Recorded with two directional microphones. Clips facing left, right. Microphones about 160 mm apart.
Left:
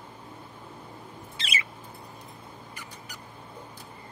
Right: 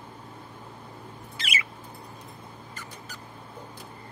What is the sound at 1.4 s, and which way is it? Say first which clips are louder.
Bird: right 1 dB; 30° left (ahead or behind).